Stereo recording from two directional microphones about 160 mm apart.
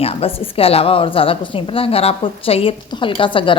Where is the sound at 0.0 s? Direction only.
35° left (ahead or behind).